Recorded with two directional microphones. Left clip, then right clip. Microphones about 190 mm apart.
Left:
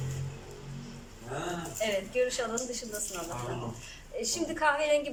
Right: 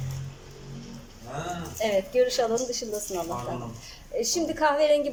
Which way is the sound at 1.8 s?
30° right (ahead or behind).